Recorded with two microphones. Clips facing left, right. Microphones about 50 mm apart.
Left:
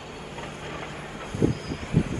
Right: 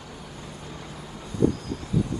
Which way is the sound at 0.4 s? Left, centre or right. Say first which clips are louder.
Left 7 dB; left.